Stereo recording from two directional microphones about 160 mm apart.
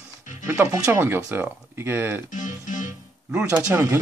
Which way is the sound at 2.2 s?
55° left (ahead or behind).